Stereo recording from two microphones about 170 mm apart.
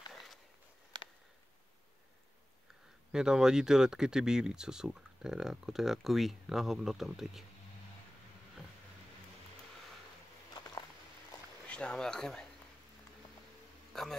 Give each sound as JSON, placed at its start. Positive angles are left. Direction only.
{"t": 0.9, "sound": "a sound", "side_deg": -25}
{"t": 3.1, "sound": "speech", "side_deg": -5}
{"t": 11.6, "sound": "speech", "side_deg": 5}
{"t": 13.9, "sound": "speech", "side_deg": 0}